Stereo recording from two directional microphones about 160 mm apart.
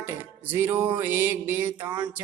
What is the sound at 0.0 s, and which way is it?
Music, 15° right (ahead or behind).